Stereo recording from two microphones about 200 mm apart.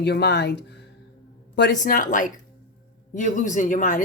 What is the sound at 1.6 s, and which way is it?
Speech, 45° left (ahead or behind).